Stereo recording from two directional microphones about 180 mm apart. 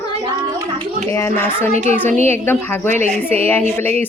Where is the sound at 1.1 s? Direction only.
15° left (ahead or behind).